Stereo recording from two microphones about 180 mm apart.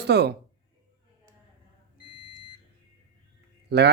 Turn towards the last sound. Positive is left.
turn(degrees=-65)  # may be behind; listen again after turning